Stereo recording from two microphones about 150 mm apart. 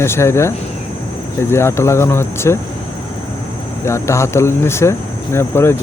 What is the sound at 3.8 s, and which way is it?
Speech, 20° left (ahead or behind).